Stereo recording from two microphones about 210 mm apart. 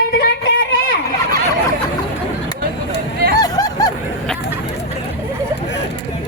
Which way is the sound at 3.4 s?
20° left (ahead or behind).